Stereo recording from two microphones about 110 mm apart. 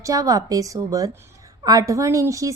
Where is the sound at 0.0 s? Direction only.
30° right (ahead or behind).